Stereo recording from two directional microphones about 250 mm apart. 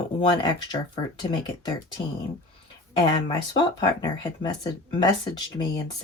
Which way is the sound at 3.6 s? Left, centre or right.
Centre.